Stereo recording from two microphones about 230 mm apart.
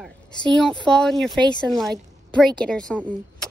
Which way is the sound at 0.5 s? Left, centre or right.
Centre.